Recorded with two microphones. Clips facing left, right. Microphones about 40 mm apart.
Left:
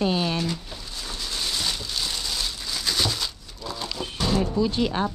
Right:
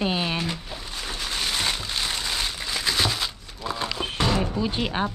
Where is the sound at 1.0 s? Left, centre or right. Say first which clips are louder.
Right 2 dB; right.